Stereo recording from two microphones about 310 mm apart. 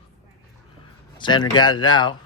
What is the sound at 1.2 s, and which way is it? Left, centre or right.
Speech, centre.